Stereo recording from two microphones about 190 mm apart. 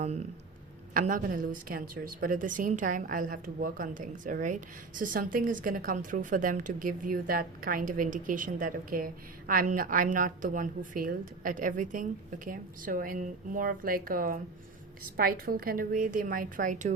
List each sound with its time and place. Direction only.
0.0 s speech: 35° right (ahead or behind)
0.9 s a woman's voice: 45° right (ahead or behind)